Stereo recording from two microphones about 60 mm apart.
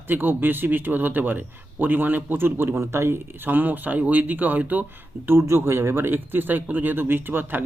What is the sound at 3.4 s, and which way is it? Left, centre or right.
Speech, right.